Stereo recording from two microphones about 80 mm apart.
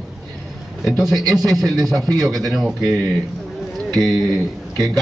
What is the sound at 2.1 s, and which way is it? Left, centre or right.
Speech, right.